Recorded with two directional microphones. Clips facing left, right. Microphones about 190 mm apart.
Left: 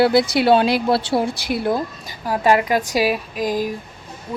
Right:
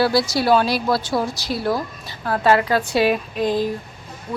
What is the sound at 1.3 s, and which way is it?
Speech, 55° left (ahead or behind).